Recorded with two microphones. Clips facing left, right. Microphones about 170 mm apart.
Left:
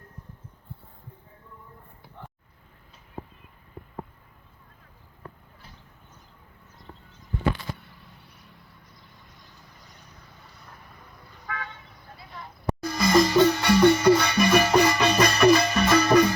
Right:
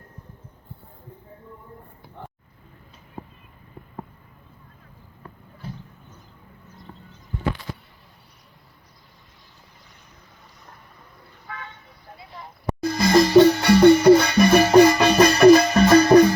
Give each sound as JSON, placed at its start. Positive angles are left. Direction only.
{"t": 12.8, "sound": "music", "side_deg": -30}